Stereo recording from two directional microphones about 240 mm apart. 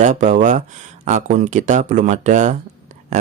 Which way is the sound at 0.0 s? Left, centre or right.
Right.